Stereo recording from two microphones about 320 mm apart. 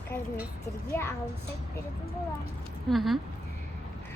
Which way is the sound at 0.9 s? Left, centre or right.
Centre.